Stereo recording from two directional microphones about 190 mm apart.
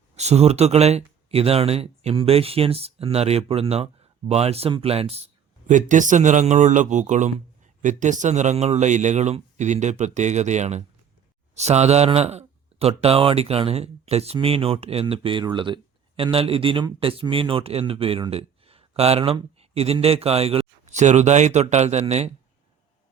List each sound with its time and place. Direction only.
0.2 s speech: 35° right (ahead or behind)